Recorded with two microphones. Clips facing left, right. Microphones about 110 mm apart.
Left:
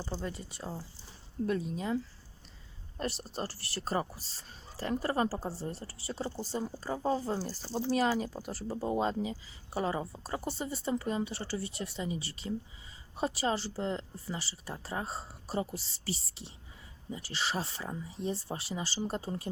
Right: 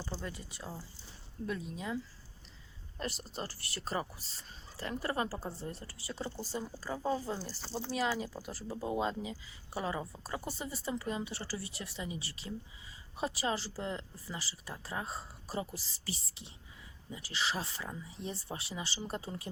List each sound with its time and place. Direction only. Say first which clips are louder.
0.0 s speech: left 4 dB; 30° left (ahead or behind)
1.5 s speech: left 5 dB; 45° left (ahead or behind)
3.0 s speech: left 4 dB; 35° left (ahead or behind)
17.1 s speech: left 1 dB; 35° left (ahead or behind)